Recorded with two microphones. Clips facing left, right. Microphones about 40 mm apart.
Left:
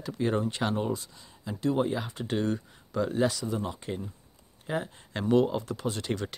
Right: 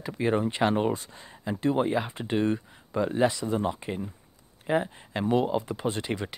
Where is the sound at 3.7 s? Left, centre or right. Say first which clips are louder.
Right 2 dB; right.